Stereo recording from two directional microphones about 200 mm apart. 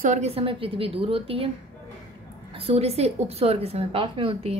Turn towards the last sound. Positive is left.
turn(degrees=-25)  # may be behind; listen again after turning